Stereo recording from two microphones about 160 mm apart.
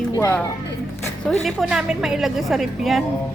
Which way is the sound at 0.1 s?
15° left (ahead or behind).